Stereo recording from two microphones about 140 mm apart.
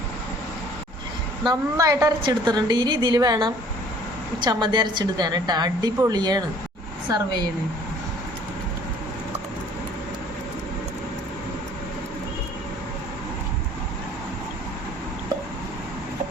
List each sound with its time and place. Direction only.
1.5 s a woman's voice: 25° right (ahead or behind)